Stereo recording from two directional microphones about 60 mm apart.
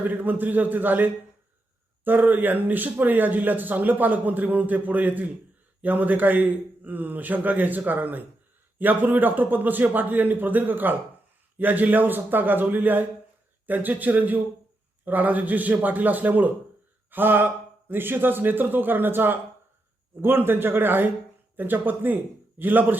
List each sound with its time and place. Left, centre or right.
0.0 s a man's voice: right